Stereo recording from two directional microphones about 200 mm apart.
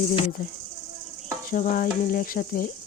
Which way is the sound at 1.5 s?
45° left (ahead or behind).